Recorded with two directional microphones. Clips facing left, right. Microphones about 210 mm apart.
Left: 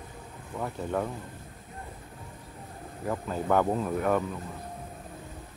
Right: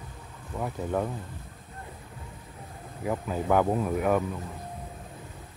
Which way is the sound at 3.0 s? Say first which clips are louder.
Right 1 dB; 5° right (ahead or behind).